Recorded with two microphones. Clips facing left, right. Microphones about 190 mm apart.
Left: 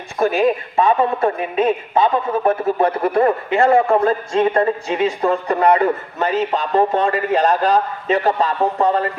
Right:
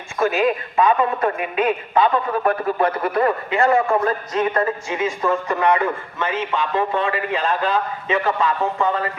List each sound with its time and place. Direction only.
0.3 s a man's voice: 30° left (ahead or behind)